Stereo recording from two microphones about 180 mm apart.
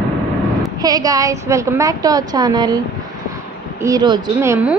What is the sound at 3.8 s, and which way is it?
Speech, 20° right (ahead or behind).